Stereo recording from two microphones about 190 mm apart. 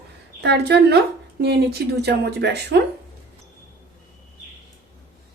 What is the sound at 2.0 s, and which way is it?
Speech, 60° right (ahead or behind).